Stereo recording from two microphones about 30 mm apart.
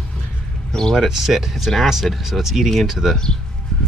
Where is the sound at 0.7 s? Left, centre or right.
Left.